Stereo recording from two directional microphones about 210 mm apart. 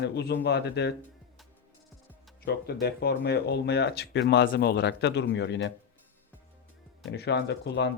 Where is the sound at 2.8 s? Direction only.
50° left (ahead or behind).